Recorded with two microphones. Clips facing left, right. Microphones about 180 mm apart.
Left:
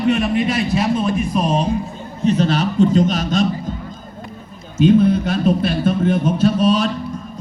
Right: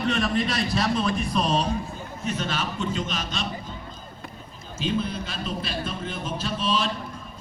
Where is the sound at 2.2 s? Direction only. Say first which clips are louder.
Left 12 dB; 35° left (ahead or behind).